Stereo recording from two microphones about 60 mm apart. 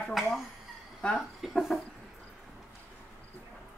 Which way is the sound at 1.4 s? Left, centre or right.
Centre.